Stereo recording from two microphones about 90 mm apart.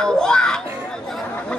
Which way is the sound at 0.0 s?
10° left (ahead or behind).